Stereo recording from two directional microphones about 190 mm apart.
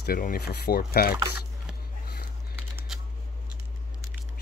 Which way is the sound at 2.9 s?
Centre (ahead or behind).